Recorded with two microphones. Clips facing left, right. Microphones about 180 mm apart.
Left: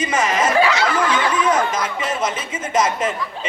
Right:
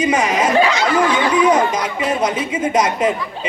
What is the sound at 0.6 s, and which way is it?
Snicker, 15° right (ahead or behind).